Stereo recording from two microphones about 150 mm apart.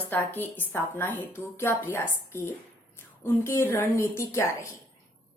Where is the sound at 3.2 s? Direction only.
15° left (ahead or behind).